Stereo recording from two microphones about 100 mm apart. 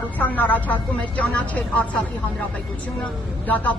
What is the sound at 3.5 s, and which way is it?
Speech, 15° left (ahead or behind).